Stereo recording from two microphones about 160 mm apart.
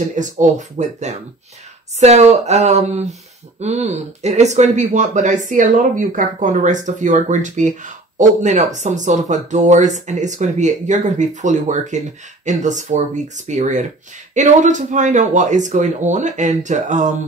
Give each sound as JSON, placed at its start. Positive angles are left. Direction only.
{"t": 0.1, "sound": "speech", "side_deg": -50}